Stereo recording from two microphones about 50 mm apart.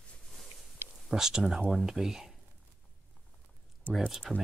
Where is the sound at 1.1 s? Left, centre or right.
Centre.